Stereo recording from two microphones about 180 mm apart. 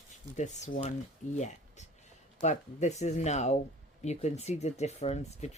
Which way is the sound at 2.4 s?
40° left (ahead or behind).